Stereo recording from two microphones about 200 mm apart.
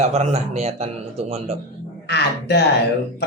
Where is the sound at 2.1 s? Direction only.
55° left (ahead or behind).